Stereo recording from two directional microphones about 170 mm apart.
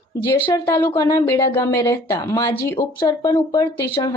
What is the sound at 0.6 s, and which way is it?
Speech, 15° left (ahead or behind).